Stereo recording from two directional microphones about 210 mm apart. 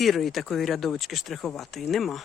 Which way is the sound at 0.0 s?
Centre (ahead or behind).